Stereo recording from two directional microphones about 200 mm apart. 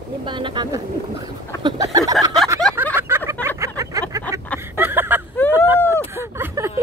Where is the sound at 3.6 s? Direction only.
15° right (ahead or behind).